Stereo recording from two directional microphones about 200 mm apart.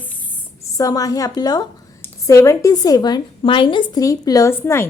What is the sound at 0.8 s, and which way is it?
A woman's voice, 15° left (ahead or behind).